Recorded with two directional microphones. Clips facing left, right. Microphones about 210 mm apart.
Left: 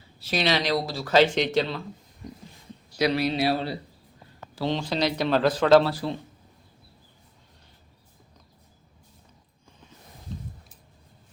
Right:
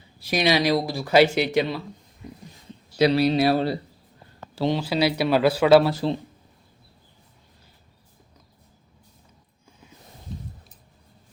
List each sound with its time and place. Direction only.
0.2 s speech: 15° right (ahead or behind)
2.2 s a sound: 5° right (ahead or behind)
3.0 s speech: 35° right (ahead or behind)
3.3 s speech: 50° right (ahead or behind)
4.6 s speech: 10° right (ahead or behind)
5.9 s speech: 25° right (ahead or behind)